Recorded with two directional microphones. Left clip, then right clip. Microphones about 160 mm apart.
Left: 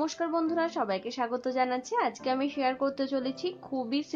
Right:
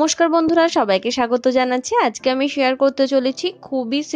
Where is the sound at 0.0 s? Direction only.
45° right (ahead or behind).